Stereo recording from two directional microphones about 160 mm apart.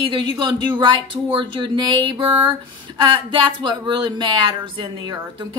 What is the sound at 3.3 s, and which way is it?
A woman's voice, 30° right (ahead or behind).